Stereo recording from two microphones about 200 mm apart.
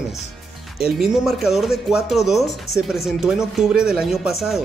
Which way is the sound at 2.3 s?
15° left (ahead or behind).